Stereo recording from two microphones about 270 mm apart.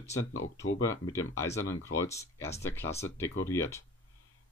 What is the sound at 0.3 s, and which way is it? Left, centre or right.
Speech, left.